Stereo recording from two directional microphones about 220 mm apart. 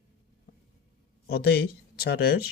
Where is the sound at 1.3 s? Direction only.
45° left (ahead or behind).